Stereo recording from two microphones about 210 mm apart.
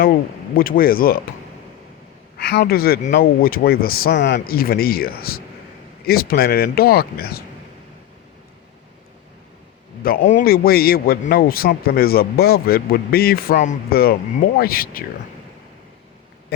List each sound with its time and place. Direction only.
0.5 s a man's voice: 45° left (ahead or behind)
2.5 s a man's voice: 50° left (ahead or behind)
10.0 s a man's voice: 45° left (ahead or behind)
16.5 s a man's voice: 50° left (ahead or behind)